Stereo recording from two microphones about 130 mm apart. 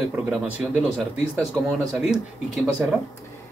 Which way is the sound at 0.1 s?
5° right (ahead or behind).